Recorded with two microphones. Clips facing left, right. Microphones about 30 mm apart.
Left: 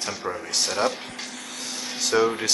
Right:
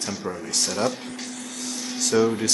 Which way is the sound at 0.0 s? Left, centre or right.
Centre.